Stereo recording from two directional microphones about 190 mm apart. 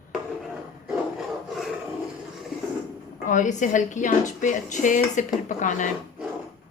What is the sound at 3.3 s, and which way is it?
Speech, 40° left (ahead or behind).